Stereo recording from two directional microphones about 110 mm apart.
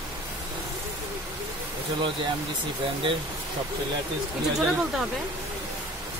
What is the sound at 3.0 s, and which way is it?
Speech, 50° right (ahead or behind).